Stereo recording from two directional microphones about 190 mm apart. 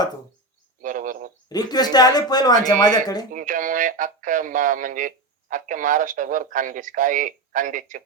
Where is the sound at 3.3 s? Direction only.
45° right (ahead or behind).